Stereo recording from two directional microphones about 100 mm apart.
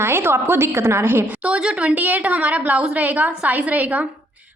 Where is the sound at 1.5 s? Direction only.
10° right (ahead or behind).